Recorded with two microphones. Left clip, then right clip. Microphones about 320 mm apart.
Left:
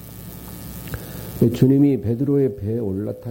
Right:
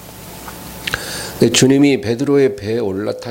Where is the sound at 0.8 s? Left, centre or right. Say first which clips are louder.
Right 16 dB; centre.